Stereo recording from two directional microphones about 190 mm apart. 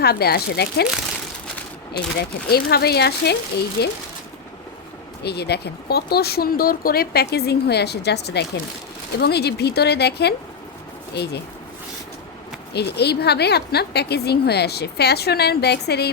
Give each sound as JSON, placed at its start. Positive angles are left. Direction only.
{"t": 0.0, "sound": "a woman's voice", "side_deg": 55}
{"t": 1.9, "sound": "a woman's voice", "side_deg": 55}
{"t": 5.2, "sound": "a woman's voice", "side_deg": 60}
{"t": 12.7, "sound": "a woman's voice", "side_deg": 60}